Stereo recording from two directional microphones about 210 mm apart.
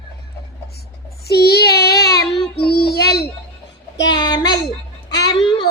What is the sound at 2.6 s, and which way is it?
Child singing, 50° left (ahead or behind).